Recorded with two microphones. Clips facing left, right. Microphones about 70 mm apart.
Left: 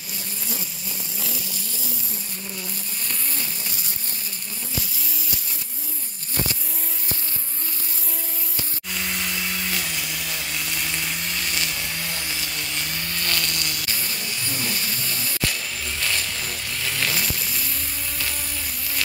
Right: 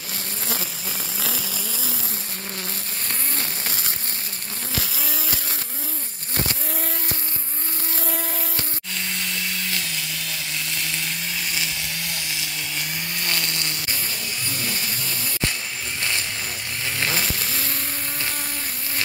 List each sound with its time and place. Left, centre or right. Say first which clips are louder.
3.6 s a sound: right 4 dB; right
8.9 s chainsaw: left 1 dB; centre
13.2 s insect: left 1 dB; right
16.0 s vehicle: even; right